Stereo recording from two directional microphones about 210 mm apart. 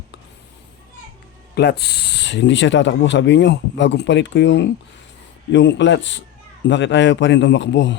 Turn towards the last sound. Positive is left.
turn(degrees=60)  # may be behind; listen again after turning